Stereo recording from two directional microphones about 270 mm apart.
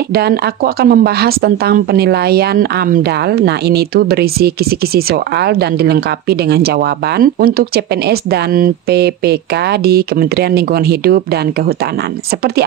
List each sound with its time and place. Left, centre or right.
0.1 s speech: right